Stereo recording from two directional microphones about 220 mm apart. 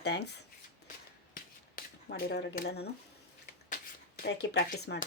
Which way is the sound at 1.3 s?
45° left (ahead or behind).